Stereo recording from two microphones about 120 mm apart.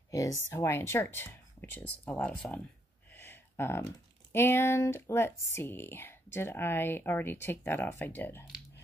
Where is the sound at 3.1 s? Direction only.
20° left (ahead or behind).